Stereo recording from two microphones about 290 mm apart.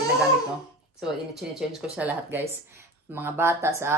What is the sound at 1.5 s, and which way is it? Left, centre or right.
A woman's voice, centre.